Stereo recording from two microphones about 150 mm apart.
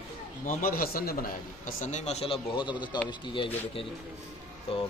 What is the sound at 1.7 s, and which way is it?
A man's voice, 50° left (ahead or behind).